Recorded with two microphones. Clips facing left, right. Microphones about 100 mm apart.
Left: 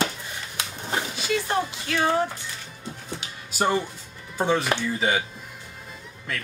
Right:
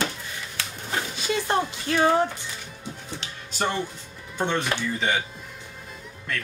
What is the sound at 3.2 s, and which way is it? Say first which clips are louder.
Music: left 3 dB; 10° left (ahead or behind).